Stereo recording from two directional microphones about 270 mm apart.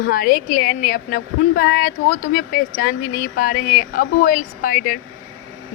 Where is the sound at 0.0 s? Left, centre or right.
Left.